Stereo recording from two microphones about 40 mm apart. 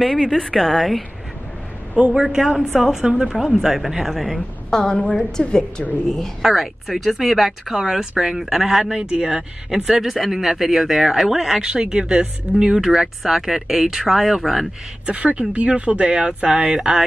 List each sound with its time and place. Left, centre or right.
0.2 s a woman's voice: centre
2.0 s speech: right
2.7 s speech: centre
4.6 s a woman's voice: centre
4.9 s a woman's voice: left
6.0 s a woman's voice: centre
6.4 s speech: centre
9.0 s speech: right
9.8 s speech: centre
11.6 s speech: right; by 14.7 s centre
15.1 s speech: right